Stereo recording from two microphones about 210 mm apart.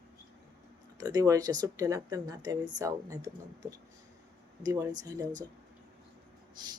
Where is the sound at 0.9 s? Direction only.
15° right (ahead or behind).